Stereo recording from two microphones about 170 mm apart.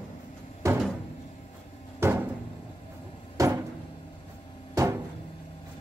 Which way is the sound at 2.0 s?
15° right (ahead or behind).